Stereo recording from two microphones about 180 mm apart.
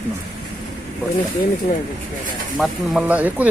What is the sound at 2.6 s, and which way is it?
Speech, 5° right (ahead or behind).